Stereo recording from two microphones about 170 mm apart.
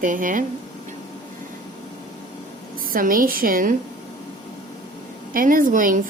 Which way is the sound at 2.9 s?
55° right (ahead or behind).